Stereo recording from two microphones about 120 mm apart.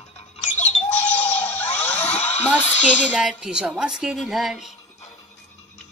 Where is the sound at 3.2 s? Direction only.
5° right (ahead or behind).